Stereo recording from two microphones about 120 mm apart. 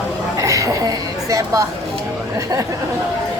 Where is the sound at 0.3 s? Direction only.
25° right (ahead or behind).